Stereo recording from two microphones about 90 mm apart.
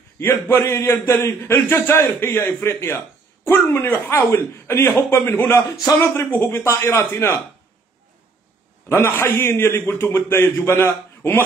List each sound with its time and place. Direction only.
0.2 s a man's voice: 30° left (ahead or behind)
8.8 s a man's voice: 25° left (ahead or behind)